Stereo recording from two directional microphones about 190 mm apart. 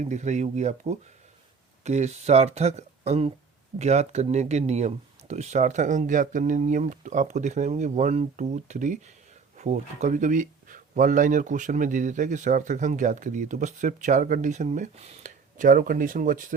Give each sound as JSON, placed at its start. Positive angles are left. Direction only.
{"t": 0.0, "sound": "speech", "side_deg": -40}